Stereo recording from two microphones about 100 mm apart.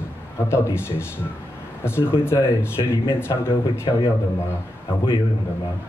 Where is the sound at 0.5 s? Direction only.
25° left (ahead or behind).